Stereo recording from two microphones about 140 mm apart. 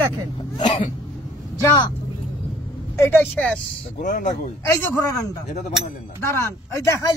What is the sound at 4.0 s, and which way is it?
Speech, 65° left (ahead or behind).